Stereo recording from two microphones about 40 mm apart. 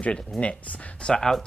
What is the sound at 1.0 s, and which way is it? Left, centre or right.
Speech, centre.